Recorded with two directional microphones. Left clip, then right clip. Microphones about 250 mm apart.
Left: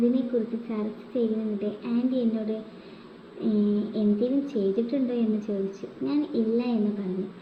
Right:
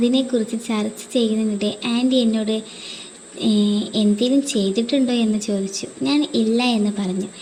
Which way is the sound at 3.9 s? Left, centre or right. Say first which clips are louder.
Right 9 dB; right.